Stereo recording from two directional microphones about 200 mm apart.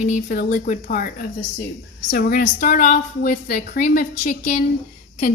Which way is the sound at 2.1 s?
45° left (ahead or behind).